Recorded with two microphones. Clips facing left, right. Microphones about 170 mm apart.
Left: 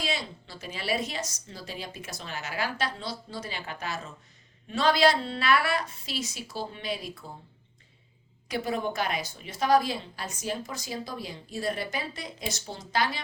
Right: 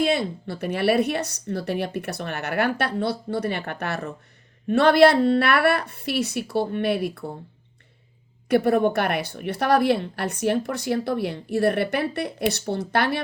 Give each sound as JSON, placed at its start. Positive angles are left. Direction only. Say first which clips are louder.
{"t": 0.0, "sound": "speech", "louder": "right 11 dB", "side_deg": -55}
{"t": 8.4, "sound": "speech", "louder": "right 11 dB", "side_deg": -60}